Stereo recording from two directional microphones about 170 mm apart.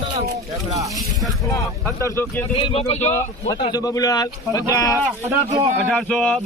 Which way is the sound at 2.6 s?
35° left (ahead or behind).